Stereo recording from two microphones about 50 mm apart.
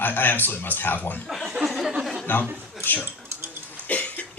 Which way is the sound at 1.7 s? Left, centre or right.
Centre.